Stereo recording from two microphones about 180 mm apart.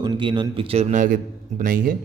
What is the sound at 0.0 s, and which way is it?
A man's voice, 25° right (ahead or behind).